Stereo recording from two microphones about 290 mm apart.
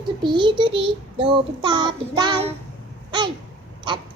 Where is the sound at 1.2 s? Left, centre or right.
Centre.